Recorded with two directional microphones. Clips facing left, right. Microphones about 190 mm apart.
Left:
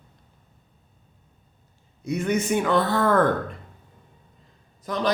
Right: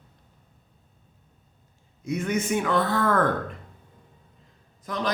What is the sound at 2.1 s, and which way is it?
Speech, 30° left (ahead or behind).